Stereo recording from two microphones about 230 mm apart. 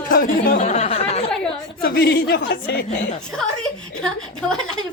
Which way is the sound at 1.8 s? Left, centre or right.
Left.